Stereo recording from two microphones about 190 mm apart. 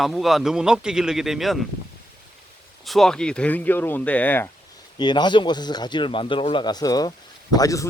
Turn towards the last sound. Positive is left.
turn(degrees=20)  # may be behind; listen again after turning